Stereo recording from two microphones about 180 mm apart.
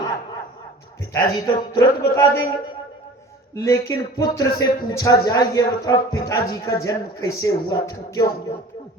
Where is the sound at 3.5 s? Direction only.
15° left (ahead or behind).